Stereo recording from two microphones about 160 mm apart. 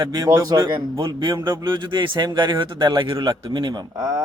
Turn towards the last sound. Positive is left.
turn(degrees=-20)  # may be behind; listen again after turning